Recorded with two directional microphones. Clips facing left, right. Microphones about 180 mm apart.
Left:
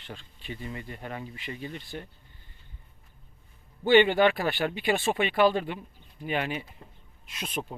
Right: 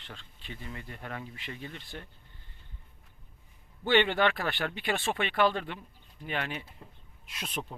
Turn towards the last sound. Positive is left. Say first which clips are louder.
# left 3 dB
turn(degrees=0)  # may be behind; listen again after turning